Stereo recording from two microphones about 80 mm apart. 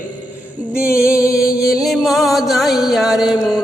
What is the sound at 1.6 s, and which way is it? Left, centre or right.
Chant, centre.